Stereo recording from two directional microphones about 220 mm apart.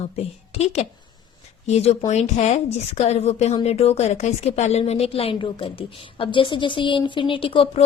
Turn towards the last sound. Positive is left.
turn(degrees=25)  # may be behind; listen again after turning